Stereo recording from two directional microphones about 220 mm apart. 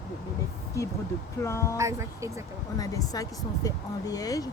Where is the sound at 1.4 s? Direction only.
15° left (ahead or behind).